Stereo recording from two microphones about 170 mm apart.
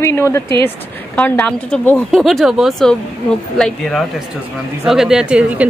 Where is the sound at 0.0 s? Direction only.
15° left (ahead or behind).